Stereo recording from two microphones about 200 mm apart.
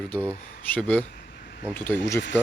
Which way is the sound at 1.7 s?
10° left (ahead or behind).